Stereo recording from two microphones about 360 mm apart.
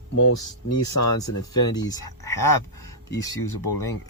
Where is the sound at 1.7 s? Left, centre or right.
Centre.